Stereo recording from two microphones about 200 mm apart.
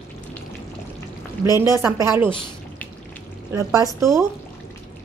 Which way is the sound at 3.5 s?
15° right (ahead or behind).